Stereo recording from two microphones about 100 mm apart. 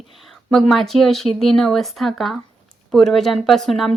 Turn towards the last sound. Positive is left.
turn(degrees=5)  # may be behind; listen again after turning